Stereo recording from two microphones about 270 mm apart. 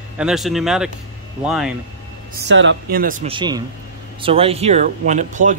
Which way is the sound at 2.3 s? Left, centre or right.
Right.